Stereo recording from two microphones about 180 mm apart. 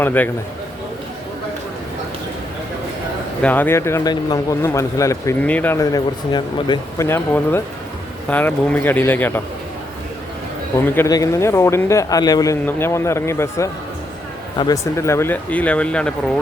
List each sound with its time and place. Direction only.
0.0 s speech: 10° left (ahead or behind)
3.4 s speech: 10° left (ahead or behind)
10.9 s speech: 15° left (ahead or behind)